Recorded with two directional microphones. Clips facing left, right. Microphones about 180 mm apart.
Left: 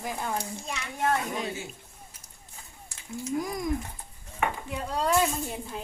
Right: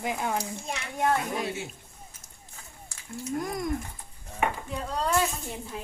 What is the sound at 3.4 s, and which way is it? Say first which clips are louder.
Speech: even; centre (ahead or behind).